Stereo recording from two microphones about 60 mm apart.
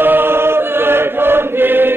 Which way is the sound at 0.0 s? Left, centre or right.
Right.